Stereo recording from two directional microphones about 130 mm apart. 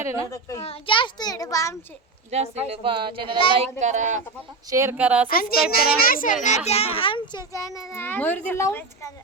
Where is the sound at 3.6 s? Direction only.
65° right (ahead or behind).